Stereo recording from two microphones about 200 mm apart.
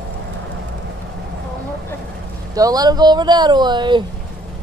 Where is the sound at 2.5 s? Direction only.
20° right (ahead or behind).